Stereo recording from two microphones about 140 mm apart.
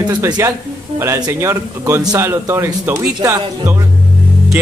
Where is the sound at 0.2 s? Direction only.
20° right (ahead or behind).